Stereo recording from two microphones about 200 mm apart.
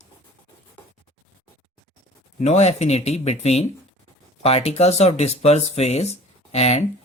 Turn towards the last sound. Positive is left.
turn(degrees=30)  # may be behind; listen again after turning